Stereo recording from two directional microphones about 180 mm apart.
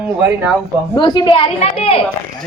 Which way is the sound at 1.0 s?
25° left (ahead or behind).